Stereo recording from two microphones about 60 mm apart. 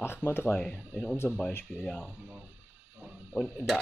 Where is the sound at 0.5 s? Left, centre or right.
Centre.